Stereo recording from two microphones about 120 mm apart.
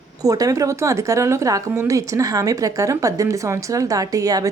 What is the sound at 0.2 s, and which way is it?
Speech, 30° right (ahead or behind).